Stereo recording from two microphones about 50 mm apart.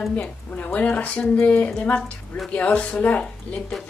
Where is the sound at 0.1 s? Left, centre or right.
Left.